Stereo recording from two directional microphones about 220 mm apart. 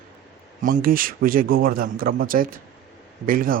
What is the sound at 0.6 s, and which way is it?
Speech, 40° right (ahead or behind).